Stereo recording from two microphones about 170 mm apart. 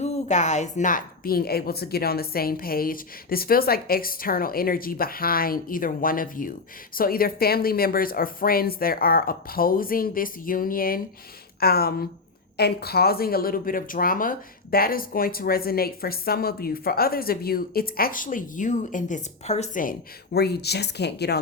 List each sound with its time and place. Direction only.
0.0 s speech: 40° left (ahead or behind); by 21.3 s 75° left (ahead or behind)